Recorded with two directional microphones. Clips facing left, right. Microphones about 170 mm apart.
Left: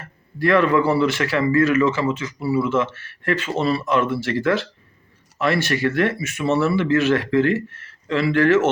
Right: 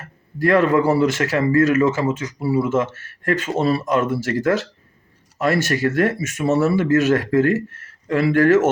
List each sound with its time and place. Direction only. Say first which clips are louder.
0.3 s speech: right 1 dB; 45° right (ahead or behind)